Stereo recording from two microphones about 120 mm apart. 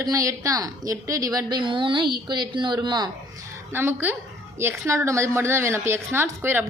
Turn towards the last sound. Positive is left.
turn(degrees=-20)  # may be behind; listen again after turning